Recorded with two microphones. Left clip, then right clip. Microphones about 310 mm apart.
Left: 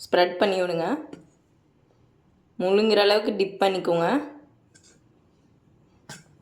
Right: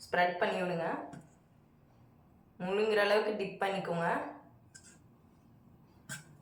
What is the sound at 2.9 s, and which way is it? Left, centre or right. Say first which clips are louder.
Speech: left 9 dB; centre.